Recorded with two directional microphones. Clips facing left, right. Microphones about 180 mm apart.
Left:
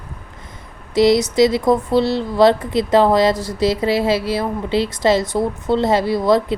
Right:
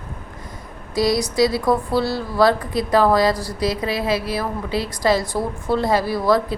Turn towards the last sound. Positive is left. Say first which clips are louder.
# left 3 dB
turn(degrees=20)  # may be behind; listen again after turning